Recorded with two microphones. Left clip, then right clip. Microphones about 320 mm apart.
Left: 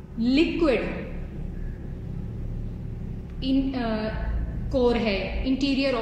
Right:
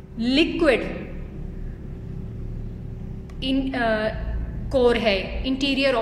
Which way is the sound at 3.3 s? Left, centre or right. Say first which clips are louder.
Right 2 dB; right.